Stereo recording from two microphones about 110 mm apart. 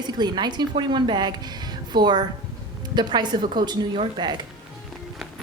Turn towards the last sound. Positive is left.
turn(degrees=-40)  # may be behind; listen again after turning